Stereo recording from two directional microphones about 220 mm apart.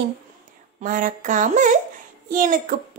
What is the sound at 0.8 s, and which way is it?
Speech, 35° right (ahead or behind).